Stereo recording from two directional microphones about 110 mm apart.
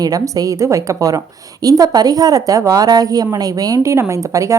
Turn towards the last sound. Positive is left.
turn(degrees=-30)  # may be behind; listen again after turning